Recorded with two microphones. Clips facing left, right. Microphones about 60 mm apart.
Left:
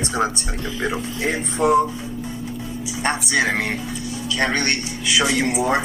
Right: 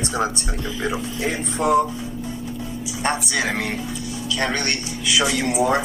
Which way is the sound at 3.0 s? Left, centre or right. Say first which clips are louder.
Left 2 dB; left.